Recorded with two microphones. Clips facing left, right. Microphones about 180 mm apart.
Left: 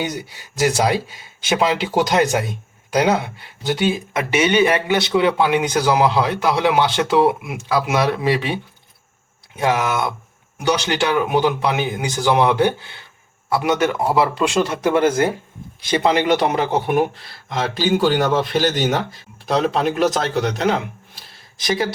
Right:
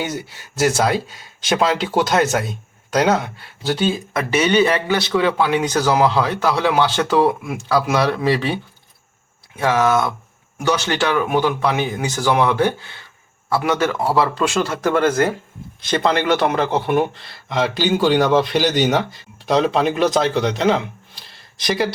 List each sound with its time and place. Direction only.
0.0 s speech: 15° left (ahead or behind)
10.6 s a man's voice: 15° left (ahead or behind)
17.2 s speech: centre (ahead or behind)